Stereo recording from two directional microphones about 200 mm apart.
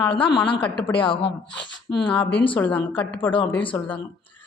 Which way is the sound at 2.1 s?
10° left (ahead or behind).